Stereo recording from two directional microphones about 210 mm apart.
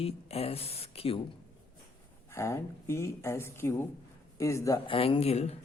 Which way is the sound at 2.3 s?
15° left (ahead or behind).